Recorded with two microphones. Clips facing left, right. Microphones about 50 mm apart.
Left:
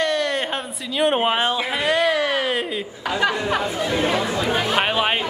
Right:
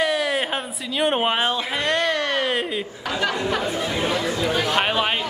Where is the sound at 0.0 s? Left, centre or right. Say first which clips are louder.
Even; centre.